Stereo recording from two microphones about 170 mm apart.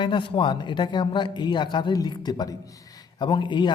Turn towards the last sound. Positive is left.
turn(degrees=25)  # may be behind; listen again after turning